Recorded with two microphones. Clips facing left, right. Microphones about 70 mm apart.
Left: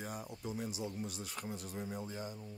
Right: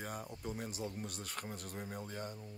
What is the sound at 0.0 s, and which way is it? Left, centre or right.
Speech, right.